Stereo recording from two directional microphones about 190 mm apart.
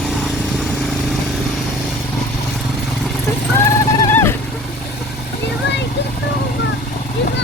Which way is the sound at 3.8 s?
10° left (ahead or behind).